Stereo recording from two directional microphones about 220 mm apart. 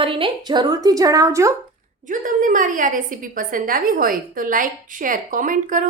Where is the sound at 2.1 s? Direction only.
35° right (ahead or behind).